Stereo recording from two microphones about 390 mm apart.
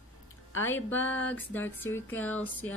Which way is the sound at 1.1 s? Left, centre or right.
Centre.